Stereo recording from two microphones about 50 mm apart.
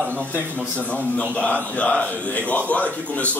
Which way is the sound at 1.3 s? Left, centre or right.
Left.